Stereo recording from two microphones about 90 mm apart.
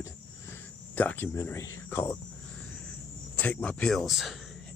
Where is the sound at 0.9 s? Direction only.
20° left (ahead or behind).